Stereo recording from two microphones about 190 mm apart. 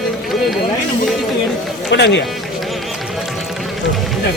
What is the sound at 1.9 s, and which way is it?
Speech, 70° left (ahead or behind).